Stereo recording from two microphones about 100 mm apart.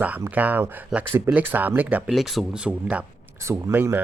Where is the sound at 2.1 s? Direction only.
Centre (ahead or behind); by 4.0 s 20° right (ahead or behind).